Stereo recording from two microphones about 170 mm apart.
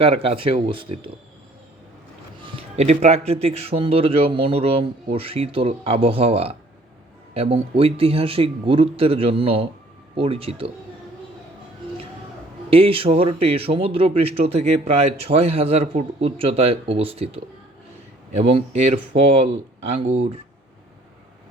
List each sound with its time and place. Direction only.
0.0 s speech: 35° right (ahead or behind)
2.4 s speech: 30° right (ahead or behind)
12.7 s speech: 35° right (ahead or behind)
19.1 s speech: 35° right (ahead or behind)